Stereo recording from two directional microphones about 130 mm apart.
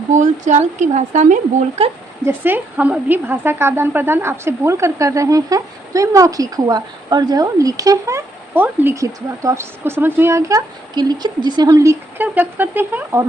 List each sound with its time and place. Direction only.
0.2 s a woman's voice: 70° right (ahead or behind)
2.2 s a woman's voice: 15° right (ahead or behind)